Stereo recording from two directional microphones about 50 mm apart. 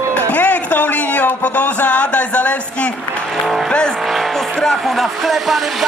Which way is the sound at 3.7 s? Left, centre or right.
Centre.